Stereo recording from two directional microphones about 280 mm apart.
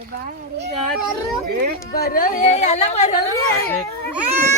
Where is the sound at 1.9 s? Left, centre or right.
Left.